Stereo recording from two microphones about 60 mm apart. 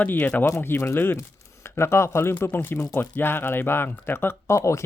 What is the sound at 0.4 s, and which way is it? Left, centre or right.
Speech, left.